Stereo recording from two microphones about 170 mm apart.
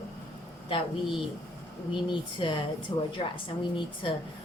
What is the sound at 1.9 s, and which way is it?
A woman's voice, 30° left (ahead or behind).